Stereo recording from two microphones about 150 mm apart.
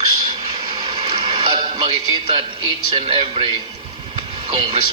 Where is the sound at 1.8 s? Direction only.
30° right (ahead or behind).